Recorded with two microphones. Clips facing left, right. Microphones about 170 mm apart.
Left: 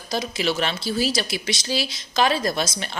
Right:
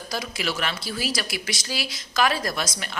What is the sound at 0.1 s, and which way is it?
A woman's voice, 25° left (ahead or behind).